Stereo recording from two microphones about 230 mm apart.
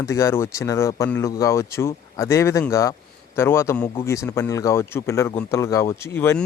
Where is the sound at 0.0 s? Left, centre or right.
Centre.